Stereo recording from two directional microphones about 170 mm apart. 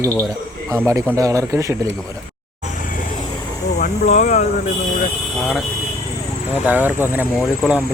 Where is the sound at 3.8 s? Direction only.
45° left (ahead or behind).